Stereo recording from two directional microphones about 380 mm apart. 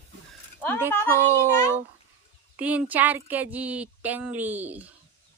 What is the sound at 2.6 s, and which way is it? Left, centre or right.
Speech, centre.